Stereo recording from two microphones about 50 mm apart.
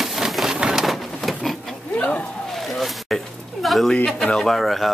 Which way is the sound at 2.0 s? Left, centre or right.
Left.